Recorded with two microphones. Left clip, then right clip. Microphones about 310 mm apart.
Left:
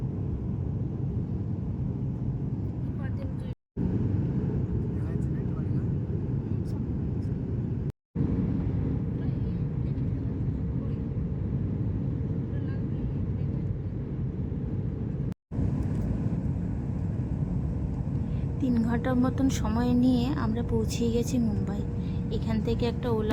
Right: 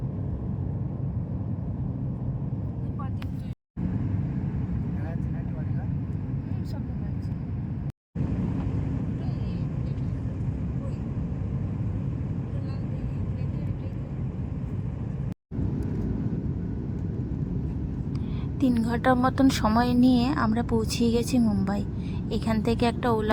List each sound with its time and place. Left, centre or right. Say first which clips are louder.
18.6 s a woman's voice: right 5 dB; centre